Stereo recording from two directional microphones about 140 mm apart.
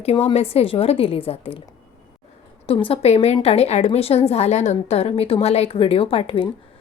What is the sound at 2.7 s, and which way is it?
A woman's voice, 40° left (ahead or behind).